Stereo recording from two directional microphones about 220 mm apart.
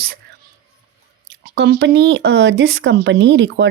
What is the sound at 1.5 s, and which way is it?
Speech, 50° right (ahead or behind).